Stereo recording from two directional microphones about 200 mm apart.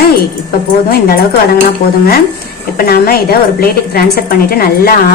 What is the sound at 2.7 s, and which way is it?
A woman's voice, 50° left (ahead or behind).